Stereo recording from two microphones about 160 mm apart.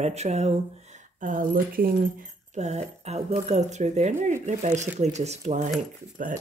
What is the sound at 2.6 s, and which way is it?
Speech, 45° right (ahead or behind).